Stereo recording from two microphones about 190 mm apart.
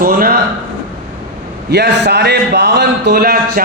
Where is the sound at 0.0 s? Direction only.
50° right (ahead or behind).